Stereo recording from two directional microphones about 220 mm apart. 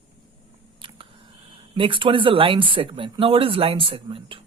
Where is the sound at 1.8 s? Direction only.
25° right (ahead or behind).